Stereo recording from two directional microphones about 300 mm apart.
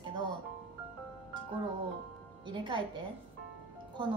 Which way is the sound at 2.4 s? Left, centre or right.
Centre.